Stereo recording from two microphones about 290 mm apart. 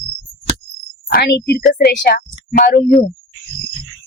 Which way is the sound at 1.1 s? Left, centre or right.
Left.